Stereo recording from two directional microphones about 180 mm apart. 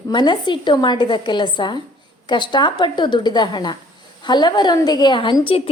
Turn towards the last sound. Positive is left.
turn(degrees=30)  # may be behind; listen again after turning